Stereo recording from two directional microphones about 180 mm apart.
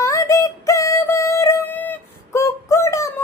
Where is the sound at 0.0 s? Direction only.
15° left (ahead or behind).